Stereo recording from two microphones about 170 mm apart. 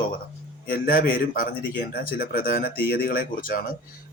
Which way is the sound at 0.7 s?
60° left (ahead or behind).